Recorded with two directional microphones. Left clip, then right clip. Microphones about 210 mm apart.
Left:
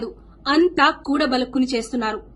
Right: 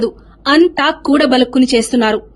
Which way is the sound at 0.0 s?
35° right (ahead or behind).